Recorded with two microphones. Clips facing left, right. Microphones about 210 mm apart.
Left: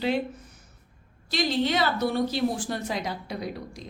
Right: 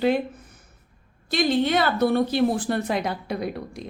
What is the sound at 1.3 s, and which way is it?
A woman's voice, 55° right (ahead or behind).